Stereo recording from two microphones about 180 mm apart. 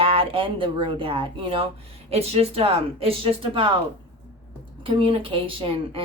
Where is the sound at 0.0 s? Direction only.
30° right (ahead or behind).